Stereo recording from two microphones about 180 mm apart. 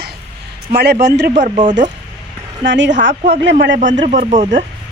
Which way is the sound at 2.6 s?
80° right.